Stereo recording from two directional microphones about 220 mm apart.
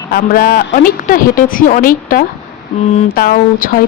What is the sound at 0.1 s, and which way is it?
A woman's voice, 40° left (ahead or behind).